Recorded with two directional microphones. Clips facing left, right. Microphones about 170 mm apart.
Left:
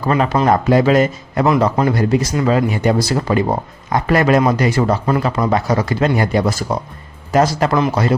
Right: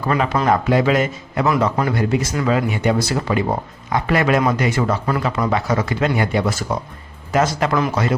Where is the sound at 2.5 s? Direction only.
40° left (ahead or behind).